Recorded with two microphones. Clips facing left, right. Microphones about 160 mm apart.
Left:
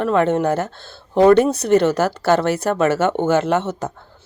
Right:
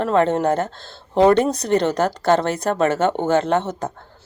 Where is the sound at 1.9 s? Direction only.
30° right (ahead or behind).